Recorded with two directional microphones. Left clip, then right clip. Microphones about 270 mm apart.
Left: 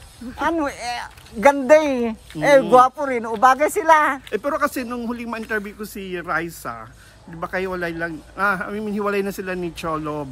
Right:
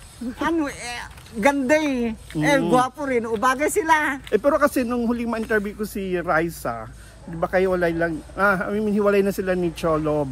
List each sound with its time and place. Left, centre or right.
0.4 s speech: left
4.3 s speech: centre